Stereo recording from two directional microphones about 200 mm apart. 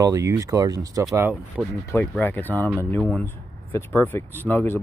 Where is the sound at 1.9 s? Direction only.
10° left (ahead or behind).